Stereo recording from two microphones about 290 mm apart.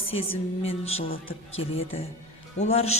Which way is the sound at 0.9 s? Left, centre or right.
Left.